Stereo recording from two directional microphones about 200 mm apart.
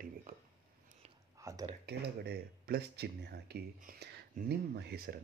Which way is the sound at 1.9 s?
50° right (ahead or behind).